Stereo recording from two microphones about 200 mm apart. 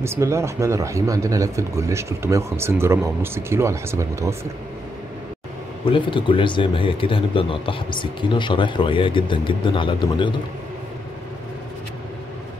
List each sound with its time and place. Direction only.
0.0 s speech: 15° right (ahead or behind)
5.9 s speech: 25° left (ahead or behind)